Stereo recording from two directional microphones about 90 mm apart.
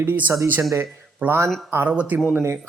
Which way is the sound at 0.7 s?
30° right (ahead or behind).